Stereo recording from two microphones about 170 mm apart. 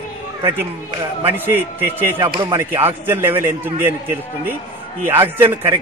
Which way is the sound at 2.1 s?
30° right (ahead or behind).